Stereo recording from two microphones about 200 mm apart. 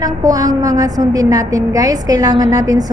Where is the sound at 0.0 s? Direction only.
20° right (ahead or behind).